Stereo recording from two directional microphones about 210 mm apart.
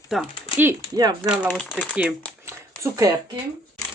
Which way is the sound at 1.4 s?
Centre (ahead or behind).